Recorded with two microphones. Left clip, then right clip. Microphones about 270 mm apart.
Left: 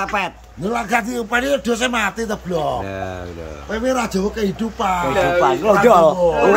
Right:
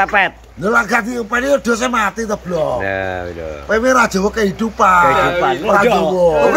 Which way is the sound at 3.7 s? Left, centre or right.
Centre.